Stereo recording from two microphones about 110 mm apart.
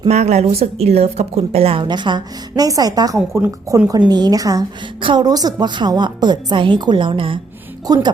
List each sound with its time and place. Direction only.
0.1 s a woman's voice: 90° right; by 1.9 s 60° right (ahead or behind)
1.9 s a woman's voice: 45° right (ahead or behind)
3.3 s a woman's voice: 20° right (ahead or behind)
4.9 s a woman's voice: 45° right (ahead or behind)
7.9 s a woman's voice: 35° right (ahead or behind)